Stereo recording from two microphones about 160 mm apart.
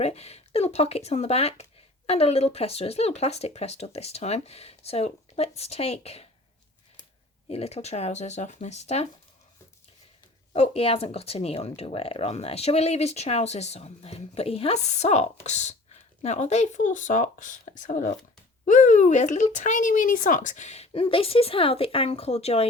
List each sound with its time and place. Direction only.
0.0 s speech: 40° left (ahead or behind)
7.4 s speech: 40° left (ahead or behind)
10.5 s speech: 40° left (ahead or behind)